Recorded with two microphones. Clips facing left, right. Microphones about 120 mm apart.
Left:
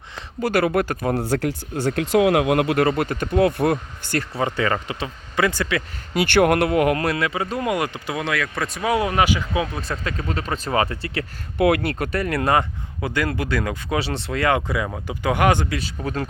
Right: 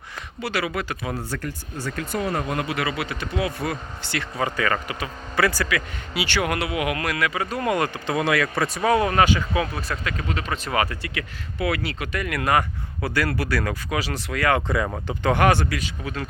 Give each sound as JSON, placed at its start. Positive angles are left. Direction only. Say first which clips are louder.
{"t": 0.4, "sound": "speech", "louder": "left 7 dB", "side_deg": 50}
{"t": 1.3, "sound": "speech", "louder": "left 8 dB", "side_deg": 75}
{"t": 4.4, "sound": "speech", "louder": "left 1 dB", "side_deg": 25}
{"t": 6.1, "sound": "speech", "louder": "left 8 dB", "side_deg": 55}
{"t": 8.1, "sound": "speech", "louder": "right 5 dB", "side_deg": -5}
{"t": 8.9, "sound": "speech", "louder": "even", "side_deg": 10}
{"t": 10.0, "sound": "speech", "louder": "left 2 dB", "side_deg": 35}
{"t": 11.5, "sound": "speech", "louder": "left 7 dB", "side_deg": 55}
{"t": 15.0, "sound": "speech", "louder": "even", "side_deg": 10}
{"t": 15.8, "sound": "speech", "louder": "left 4 dB", "side_deg": 40}